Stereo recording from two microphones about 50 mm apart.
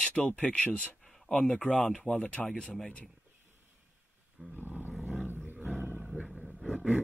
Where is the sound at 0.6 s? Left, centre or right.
Left.